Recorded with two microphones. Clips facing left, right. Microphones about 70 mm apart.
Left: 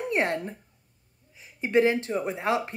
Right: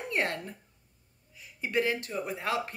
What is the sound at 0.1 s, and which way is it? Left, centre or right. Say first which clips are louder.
Speech: left 4 dB; left.